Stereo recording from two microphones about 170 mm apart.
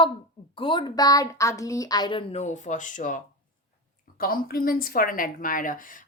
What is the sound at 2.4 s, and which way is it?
Speech, 45° left (ahead or behind).